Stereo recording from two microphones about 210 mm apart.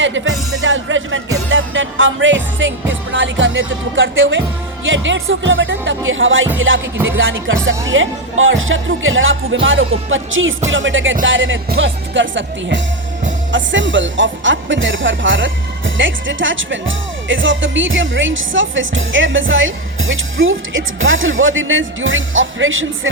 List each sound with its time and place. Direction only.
0.0 s music: 65° right (ahead or behind)
2.9 s speech: 65° right (ahead or behind)